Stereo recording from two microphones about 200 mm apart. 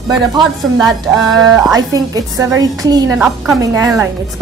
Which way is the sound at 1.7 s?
20° right (ahead or behind).